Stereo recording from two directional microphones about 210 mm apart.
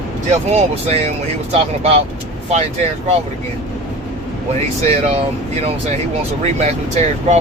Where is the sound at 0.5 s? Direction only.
30° right (ahead or behind).